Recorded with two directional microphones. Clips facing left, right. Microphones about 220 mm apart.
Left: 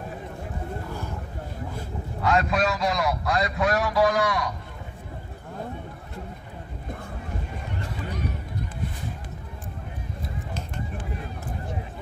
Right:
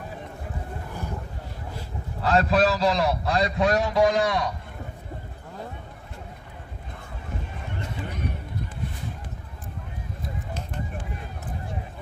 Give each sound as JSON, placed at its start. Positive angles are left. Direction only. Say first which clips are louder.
{"t": 2.2, "sound": "a man's voice", "louder": "right 3 dB", "side_deg": -35}